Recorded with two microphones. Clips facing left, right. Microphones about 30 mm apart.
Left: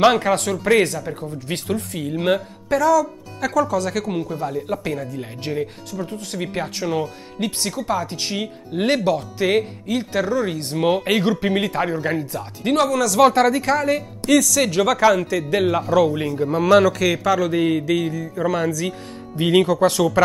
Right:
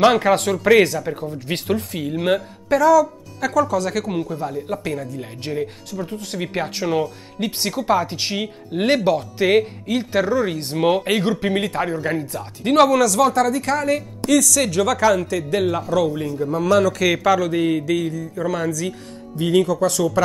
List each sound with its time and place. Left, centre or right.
0.2 s speech: centre
2.1 s speech: centre
7.5 s speech: centre
12.7 s speech: centre
13.2 s speech: left
13.5 s a man's voice: centre
16.3 s speech: left
17.0 s a man's voice: centre; by 20.2 s left